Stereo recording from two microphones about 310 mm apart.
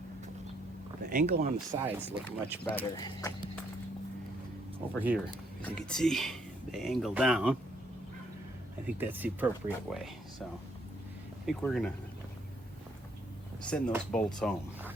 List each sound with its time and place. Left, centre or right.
1.1 s speech: right
1.8 s speech: centre
2.9 s speech: centre
4.9 s speech: centre
9.0 s speech: centre
11.4 s speech: centre
13.6 s speech: centre